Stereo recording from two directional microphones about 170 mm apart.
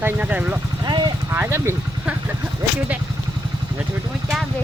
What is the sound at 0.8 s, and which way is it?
Vehicle, 25° right (ahead or behind).